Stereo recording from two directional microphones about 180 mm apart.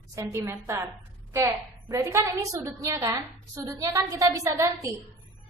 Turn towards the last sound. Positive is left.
turn(degrees=-15)  # may be behind; listen again after turning